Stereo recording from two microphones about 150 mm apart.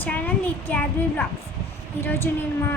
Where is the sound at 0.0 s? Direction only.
10° left (ahead or behind).